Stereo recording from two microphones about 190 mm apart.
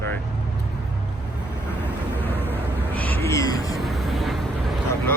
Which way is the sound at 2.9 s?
10° left (ahead or behind).